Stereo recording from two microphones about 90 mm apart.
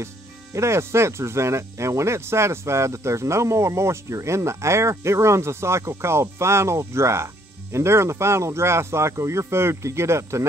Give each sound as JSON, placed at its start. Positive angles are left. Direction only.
{"t": 0.6, "sound": "speech", "side_deg": -30}